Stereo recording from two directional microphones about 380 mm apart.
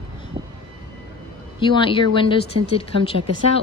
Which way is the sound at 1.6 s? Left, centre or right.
Centre.